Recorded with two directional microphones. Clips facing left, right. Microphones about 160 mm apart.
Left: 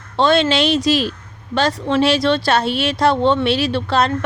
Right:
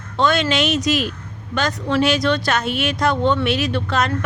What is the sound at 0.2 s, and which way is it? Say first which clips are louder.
A woman's voice: left 3 dB; 30° left (ahead or behind).